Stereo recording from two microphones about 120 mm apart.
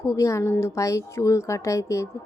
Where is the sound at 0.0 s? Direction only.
25° left (ahead or behind).